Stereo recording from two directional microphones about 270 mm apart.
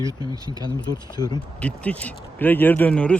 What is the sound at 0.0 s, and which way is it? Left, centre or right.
Speech, centre.